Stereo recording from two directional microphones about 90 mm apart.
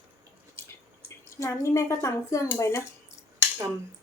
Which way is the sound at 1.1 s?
35° left (ahead or behind).